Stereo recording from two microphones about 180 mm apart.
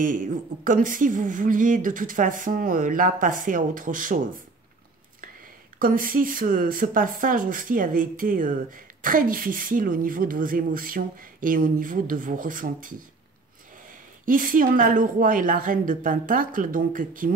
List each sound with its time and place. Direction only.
0.0 s speech: 45° right (ahead or behind)
5.8 s speech: 50° right (ahead or behind)
14.2 s speech: 50° right (ahead or behind)